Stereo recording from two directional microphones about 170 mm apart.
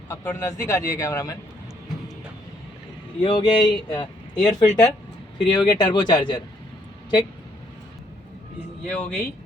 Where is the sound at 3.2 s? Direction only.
25° left (ahead or behind).